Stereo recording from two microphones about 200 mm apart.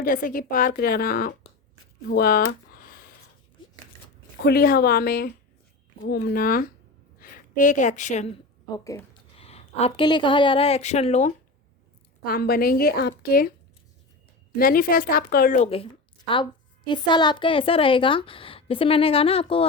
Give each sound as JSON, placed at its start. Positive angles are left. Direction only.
{"t": 0.0, "sound": "a woman's voice", "side_deg": 45}
{"t": 2.0, "sound": "a sound", "side_deg": 50}
{"t": 4.4, "sound": "a woman's voice", "side_deg": 45}
{"t": 8.7, "sound": "speech", "side_deg": 15}
{"t": 9.4, "sound": "a woman's voice", "side_deg": 30}
{"t": 12.2, "sound": "a woman's voice", "side_deg": 50}
{"t": 14.6, "sound": "a woman's voice", "side_deg": 45}
{"t": 15.7, "sound": "a woman's voice", "side_deg": 25}